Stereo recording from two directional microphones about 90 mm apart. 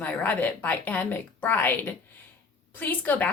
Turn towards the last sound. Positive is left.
turn(degrees=20)  # may be behind; listen again after turning